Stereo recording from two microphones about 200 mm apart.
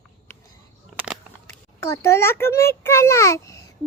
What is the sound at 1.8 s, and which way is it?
A child's voice, 15° left (ahead or behind).